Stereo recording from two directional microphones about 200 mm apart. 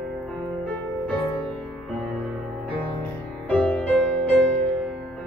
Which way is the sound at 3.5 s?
5° left (ahead or behind).